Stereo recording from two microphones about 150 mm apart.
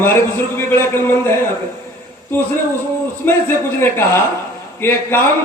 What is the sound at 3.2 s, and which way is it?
Speech, 15° left (ahead or behind).